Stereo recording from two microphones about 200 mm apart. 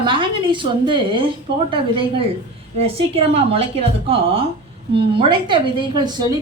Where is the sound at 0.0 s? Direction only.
25° right (ahead or behind).